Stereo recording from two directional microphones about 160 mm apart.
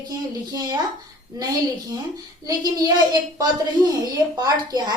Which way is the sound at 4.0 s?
25° right (ahead or behind).